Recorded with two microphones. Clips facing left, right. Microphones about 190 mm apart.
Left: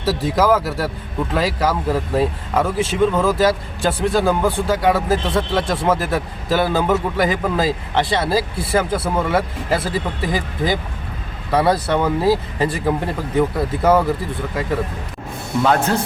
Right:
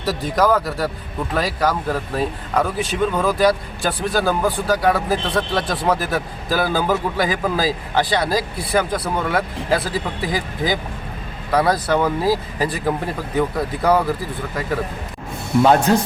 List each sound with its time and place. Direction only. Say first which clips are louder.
0.0 s speech: left 1 dB; centre (ahead or behind)
8.3 s speech: left 2 dB; 30° left (ahead or behind)
8.7 s speech: left 1 dB; 5° left (ahead or behind)
15.6 s speech: right 3 dB; 20° right (ahead or behind)